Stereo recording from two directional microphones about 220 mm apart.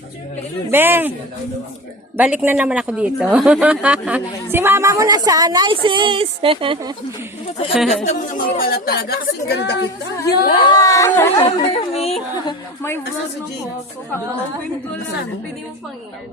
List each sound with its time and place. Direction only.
0.7 s a man's voice: 10° right (ahead or behind)
2.1 s a man's voice: 5° right (ahead or behind); by 6.9 s 25° right (ahead or behind)
7.7 s speech: centre (ahead or behind)
8.0 s speech: 35° left (ahead or behind)
10.6 s speech: 20° left (ahead or behind)
11.3 s a sound: 25° left (ahead or behind)